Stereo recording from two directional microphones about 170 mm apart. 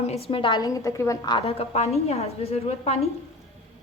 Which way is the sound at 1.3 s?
35° left (ahead or behind).